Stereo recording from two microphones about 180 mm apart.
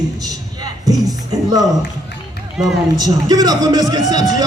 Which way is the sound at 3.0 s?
20° right (ahead or behind).